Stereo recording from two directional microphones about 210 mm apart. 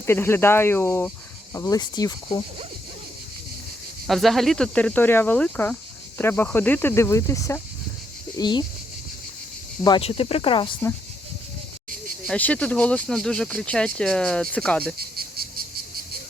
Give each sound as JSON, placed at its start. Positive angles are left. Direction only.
{"t": 0.0, "sound": "speech", "side_deg": 10}
{"t": 4.0, "sound": "speech", "side_deg": 0}
{"t": 9.8, "sound": "speech", "side_deg": 25}
{"t": 12.3, "sound": "speech", "side_deg": 5}
{"t": 14.9, "sound": "cricket", "side_deg": -45}